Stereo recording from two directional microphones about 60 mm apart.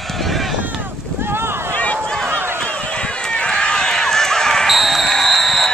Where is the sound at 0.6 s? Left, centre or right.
Right.